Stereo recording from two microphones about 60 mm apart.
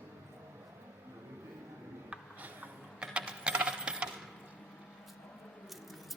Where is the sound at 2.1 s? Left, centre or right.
Right.